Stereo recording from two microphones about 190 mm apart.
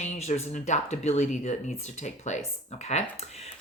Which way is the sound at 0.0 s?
35° left (ahead or behind).